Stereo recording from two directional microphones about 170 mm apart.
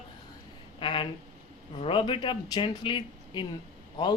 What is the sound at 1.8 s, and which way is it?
A man's voice, 30° left (ahead or behind).